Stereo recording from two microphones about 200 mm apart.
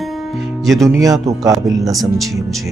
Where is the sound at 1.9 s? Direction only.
Centre (ahead or behind).